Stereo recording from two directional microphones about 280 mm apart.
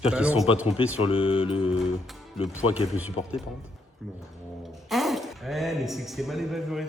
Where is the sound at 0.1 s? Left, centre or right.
Centre.